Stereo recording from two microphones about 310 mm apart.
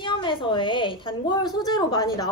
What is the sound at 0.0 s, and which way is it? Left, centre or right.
A woman's voice, centre.